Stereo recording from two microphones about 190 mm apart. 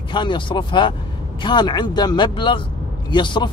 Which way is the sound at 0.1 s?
25° left (ahead or behind).